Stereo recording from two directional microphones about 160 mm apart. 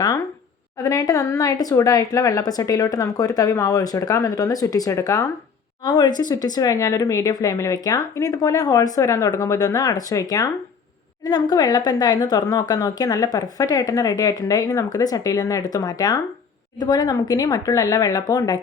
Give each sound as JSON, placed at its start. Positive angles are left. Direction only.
{"t": 0.9, "sound": "a woman's voice", "side_deg": 20}